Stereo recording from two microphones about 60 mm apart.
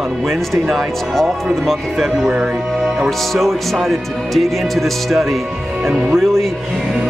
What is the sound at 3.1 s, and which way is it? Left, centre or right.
Speech, centre.